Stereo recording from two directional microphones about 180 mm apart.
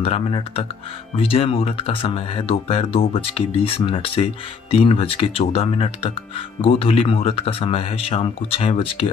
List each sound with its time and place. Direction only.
0.0 s speech: 35° left (ahead or behind)